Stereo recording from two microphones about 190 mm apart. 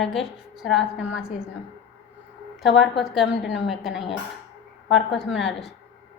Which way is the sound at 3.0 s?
Centre (ahead or behind).